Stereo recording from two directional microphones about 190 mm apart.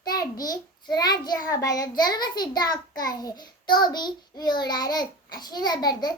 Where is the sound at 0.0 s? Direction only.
20° left (ahead or behind).